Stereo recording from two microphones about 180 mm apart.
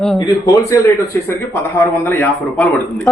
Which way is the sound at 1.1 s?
15° left (ahead or behind).